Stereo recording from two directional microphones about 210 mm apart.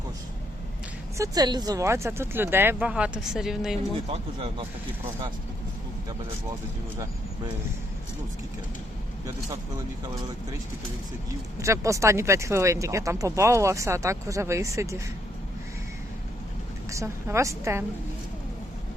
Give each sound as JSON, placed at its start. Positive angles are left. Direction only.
{"t": 1.2, "sound": "speech", "side_deg": -15}
{"t": 4.1, "sound": "speech", "side_deg": -25}
{"t": 11.6, "sound": "speech", "side_deg": -15}
{"t": 16.9, "sound": "speech", "side_deg": -15}